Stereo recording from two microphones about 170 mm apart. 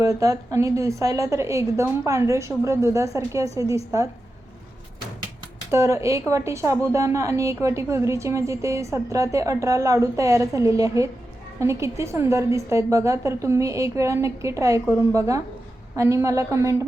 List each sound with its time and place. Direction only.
0.0 s a woman's voice: 20° right (ahead or behind)
5.7 s a woman's voice: 20° right (ahead or behind)